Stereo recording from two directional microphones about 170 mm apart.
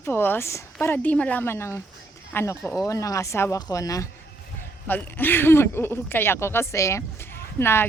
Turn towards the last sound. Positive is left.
turn(degrees=15)  # may be behind; listen again after turning